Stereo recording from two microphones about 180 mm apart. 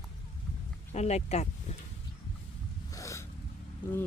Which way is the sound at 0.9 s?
35° left (ahead or behind).